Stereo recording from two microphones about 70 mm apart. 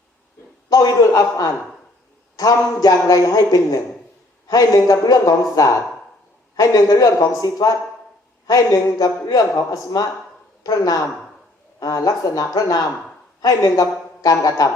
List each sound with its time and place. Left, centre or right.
0.7 s a man's voice: left
13.6 s speech: left
14.2 s a man's voice: left